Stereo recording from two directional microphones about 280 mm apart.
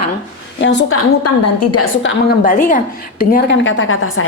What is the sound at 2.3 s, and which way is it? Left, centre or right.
Speech, left.